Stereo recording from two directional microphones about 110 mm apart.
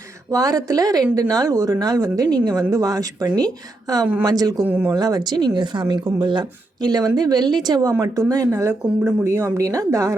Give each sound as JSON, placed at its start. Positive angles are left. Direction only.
{"t": 0.3, "sound": "speech", "side_deg": -35}
{"t": 4.7, "sound": "speech", "side_deg": -20}
{"t": 4.9, "sound": "speech", "side_deg": -40}